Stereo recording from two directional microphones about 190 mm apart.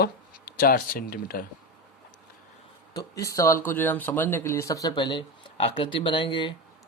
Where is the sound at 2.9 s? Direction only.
15° left (ahead or behind).